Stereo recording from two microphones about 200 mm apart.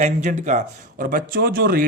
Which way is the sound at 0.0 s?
35° right (ahead or behind).